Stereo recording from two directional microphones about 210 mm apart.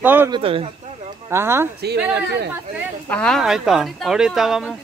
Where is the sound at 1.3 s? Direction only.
10° right (ahead or behind).